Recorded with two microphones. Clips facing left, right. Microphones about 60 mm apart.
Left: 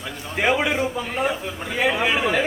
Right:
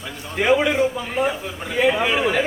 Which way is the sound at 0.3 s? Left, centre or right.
Centre.